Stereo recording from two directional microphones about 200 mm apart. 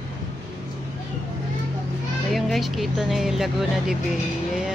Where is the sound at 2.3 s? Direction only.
Centre (ahead or behind).